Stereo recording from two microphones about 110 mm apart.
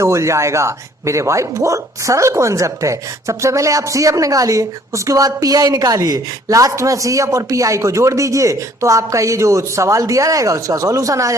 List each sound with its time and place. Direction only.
0.0 s speech: 25° right (ahead or behind)